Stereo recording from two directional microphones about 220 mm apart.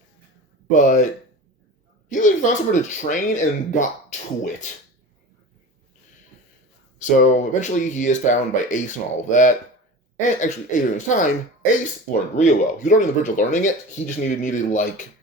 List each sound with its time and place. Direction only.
0.7 s speech: 35° left (ahead or behind)
2.0 s speech: 35° left (ahead or behind)
7.3 s speech: 35° left (ahead or behind)